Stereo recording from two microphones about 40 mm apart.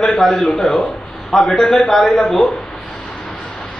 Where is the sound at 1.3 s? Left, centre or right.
Centre.